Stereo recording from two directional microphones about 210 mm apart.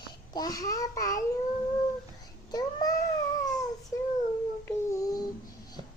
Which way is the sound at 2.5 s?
20° left (ahead or behind).